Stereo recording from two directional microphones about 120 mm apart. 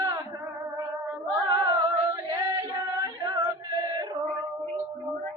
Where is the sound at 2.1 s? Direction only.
30° right (ahead or behind).